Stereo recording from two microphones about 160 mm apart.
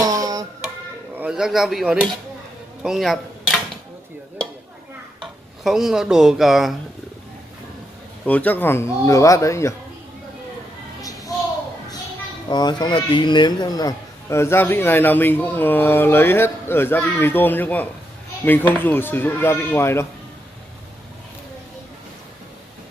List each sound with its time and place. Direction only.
0.0 s music: 20° right (ahead or behind)
1.1 s a man's voice: 5° right (ahead or behind)
5.2 s speech: centre (ahead or behind)
8.3 s speech: 10° left (ahead or behind)
11.0 s a sound: 20° left (ahead or behind)
12.4 s speech: 25° left (ahead or behind)